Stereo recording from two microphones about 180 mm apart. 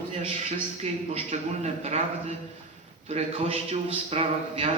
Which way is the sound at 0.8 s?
35° right (ahead or behind).